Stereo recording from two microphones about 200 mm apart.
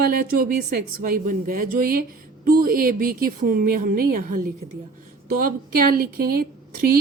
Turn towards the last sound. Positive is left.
turn(degrees=-50)  # may be behind; listen again after turning